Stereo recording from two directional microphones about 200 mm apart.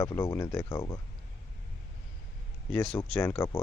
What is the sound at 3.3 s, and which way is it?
Speech, 20° left (ahead or behind).